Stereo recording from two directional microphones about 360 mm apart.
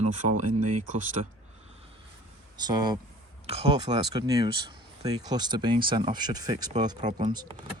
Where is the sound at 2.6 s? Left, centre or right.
Centre.